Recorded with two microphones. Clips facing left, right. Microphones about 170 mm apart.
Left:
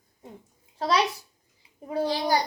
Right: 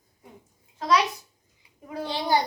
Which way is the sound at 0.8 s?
30° left (ahead or behind).